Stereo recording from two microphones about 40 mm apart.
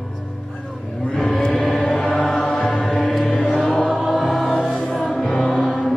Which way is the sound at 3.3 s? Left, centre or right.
Left.